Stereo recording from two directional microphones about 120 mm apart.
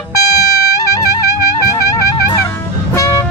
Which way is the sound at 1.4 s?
30° left (ahead or behind).